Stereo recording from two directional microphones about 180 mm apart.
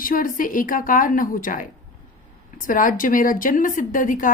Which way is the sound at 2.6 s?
50° left (ahead or behind).